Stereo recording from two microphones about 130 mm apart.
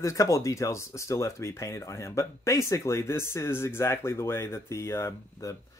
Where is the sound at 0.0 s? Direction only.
25° left (ahead or behind).